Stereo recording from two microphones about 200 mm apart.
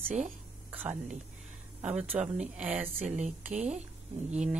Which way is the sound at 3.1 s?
35° right (ahead or behind).